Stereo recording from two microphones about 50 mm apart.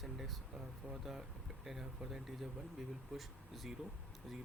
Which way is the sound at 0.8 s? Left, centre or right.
Right.